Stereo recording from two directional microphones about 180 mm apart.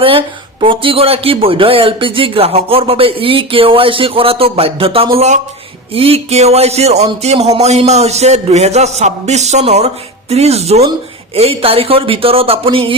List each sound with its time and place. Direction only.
0.0 s speech: 30° right (ahead or behind)